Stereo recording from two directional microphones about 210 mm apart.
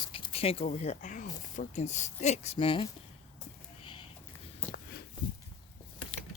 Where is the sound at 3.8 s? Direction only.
25° left (ahead or behind).